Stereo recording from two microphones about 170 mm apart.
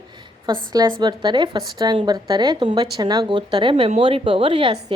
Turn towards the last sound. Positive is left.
turn(degrees=-30)  # may be behind; listen again after turning